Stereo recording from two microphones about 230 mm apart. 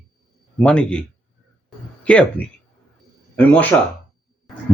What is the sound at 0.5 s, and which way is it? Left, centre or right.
A man's voice, centre.